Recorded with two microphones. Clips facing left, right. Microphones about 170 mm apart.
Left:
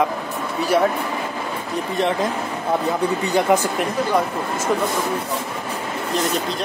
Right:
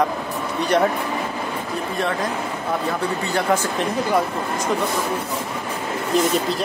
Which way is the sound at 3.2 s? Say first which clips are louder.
Left 3 dB; 15° left (ahead or behind).